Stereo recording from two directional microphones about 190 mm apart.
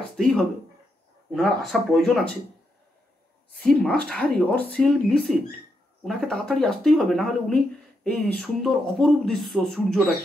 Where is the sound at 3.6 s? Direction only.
5° left (ahead or behind).